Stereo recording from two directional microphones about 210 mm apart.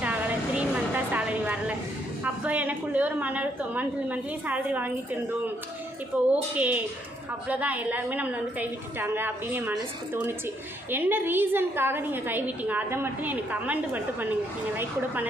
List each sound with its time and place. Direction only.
0.0 s a sound: 5° right (ahead or behind)
2.2 s a woman's voice: 5° right (ahead or behind)
6.1 s a woman's voice: 5° right (ahead or behind)